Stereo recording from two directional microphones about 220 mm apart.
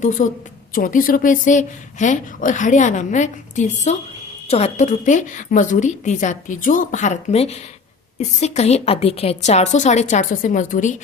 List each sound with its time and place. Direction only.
0.0 s a woman's voice: 35° left (ahead or behind)